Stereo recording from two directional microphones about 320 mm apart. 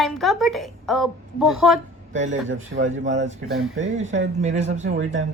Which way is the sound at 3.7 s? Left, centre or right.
Right.